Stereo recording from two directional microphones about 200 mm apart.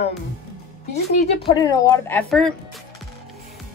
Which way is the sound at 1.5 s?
20° left (ahead or behind).